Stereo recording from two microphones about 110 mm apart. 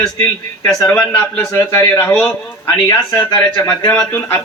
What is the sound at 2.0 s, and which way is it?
Speech, 15° left (ahead or behind).